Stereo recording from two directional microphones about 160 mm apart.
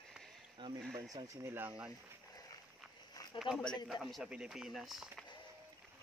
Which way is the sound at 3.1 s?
25° left (ahead or behind).